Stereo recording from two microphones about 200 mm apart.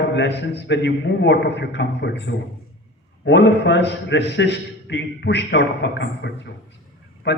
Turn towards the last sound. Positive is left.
turn(degrees=60)  # may be behind; listen again after turning